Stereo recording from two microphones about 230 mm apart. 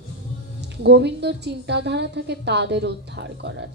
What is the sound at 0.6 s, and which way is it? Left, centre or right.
A woman's voice, right.